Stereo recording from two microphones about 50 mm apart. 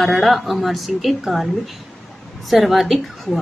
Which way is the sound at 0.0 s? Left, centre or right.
Centre.